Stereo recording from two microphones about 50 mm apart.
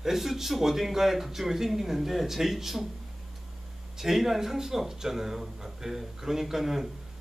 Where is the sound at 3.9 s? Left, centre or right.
Centre.